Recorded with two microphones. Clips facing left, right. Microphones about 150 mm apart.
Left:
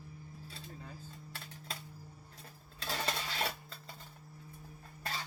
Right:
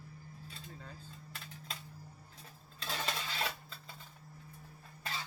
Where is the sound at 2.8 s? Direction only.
40° left (ahead or behind).